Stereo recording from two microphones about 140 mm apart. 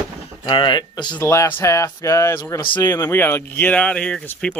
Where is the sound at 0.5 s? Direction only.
35° left (ahead or behind).